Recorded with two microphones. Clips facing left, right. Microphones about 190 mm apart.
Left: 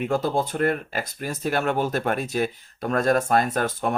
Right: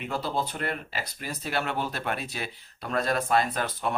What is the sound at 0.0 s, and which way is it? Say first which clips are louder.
Speech: left 7 dB; 45° left (ahead or behind).